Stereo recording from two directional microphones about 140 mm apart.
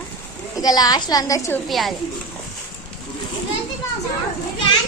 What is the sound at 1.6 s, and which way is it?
Speech, centre (ahead or behind).